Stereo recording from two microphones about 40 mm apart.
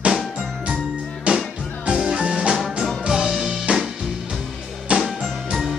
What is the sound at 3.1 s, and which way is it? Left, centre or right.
Music, centre.